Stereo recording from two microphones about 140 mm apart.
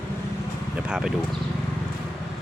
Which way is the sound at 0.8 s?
5° right (ahead or behind).